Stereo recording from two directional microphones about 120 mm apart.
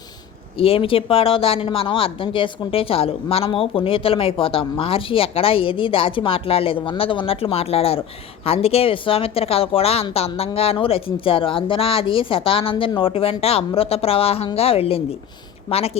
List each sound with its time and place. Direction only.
0.6 s a woman's voice: 50° left (ahead or behind)